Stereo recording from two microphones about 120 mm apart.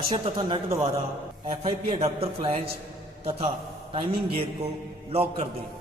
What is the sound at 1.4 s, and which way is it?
A man's voice, 50° right (ahead or behind).